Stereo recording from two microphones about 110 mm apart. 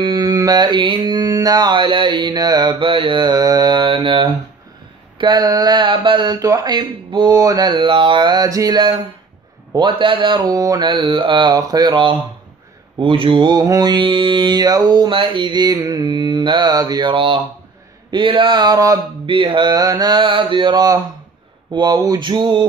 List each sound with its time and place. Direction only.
0.0 s mantra: 40° right (ahead or behind)
6.8 s mantra: 45° right (ahead or behind)
10.9 s mantra: 50° right (ahead or behind)
19.2 s mantra: 45° right (ahead or behind)